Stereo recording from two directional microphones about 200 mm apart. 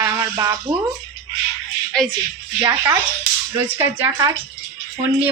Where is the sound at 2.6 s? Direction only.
15° right (ahead or behind).